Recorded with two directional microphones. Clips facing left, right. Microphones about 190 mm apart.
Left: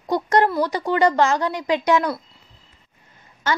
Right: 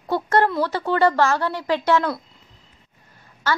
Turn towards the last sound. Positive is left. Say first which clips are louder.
# even
turn(degrees=20)  # may be behind; listen again after turning